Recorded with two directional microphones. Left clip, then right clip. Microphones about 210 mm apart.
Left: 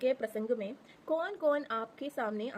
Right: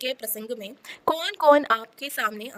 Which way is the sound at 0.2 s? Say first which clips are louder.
Even; centre (ahead or behind).